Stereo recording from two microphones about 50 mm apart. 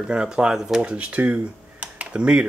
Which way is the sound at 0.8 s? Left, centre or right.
Right.